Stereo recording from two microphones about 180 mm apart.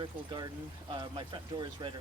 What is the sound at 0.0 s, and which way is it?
Speech, 25° right (ahead or behind).